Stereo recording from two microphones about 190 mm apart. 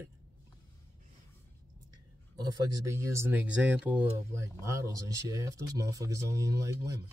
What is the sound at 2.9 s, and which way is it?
Speech, 15° right (ahead or behind).